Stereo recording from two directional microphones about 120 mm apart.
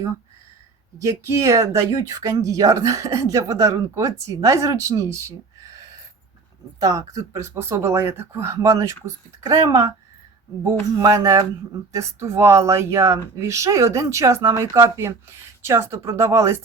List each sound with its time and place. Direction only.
0.9 s speech: 25° right (ahead or behind)